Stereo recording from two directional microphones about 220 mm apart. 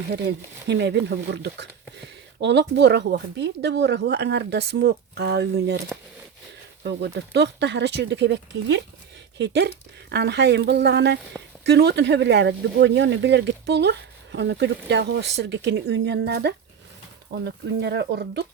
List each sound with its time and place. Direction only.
0.1 s speech: 50° right (ahead or behind)
6.8 s speech: 50° right (ahead or behind)